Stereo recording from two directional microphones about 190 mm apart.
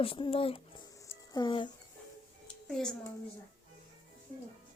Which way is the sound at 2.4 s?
5° left (ahead or behind).